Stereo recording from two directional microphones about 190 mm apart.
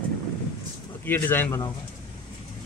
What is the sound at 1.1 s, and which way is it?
Speech, 10° left (ahead or behind).